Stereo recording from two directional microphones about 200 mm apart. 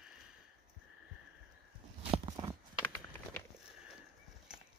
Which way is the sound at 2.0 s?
25° right (ahead or behind).